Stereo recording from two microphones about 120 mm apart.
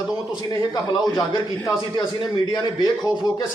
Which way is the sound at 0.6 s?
35° left (ahead or behind).